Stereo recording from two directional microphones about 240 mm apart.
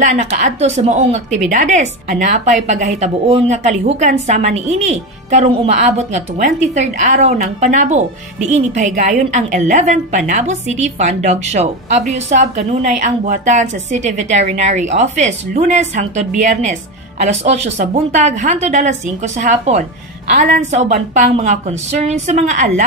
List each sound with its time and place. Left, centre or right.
0.0 s a woman's voice: right